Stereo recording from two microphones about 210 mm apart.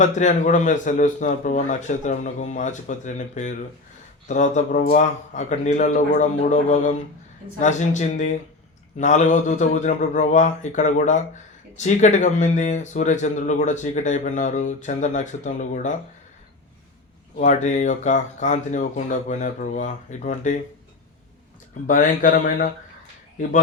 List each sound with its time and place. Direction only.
0.0 s speech: 35° left (ahead or behind)
17.3 s speech: 35° left (ahead or behind)
21.8 s speech: 40° left (ahead or behind)